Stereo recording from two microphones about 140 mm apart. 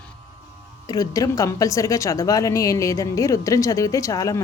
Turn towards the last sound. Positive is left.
turn(degrees=25)  # may be behind; listen again after turning